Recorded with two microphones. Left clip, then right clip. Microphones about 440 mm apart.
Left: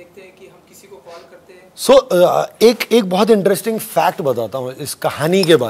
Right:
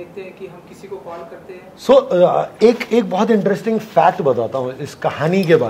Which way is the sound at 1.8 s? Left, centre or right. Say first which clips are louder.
Left 1 dB; left.